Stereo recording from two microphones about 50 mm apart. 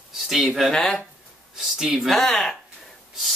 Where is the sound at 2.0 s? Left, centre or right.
Centre.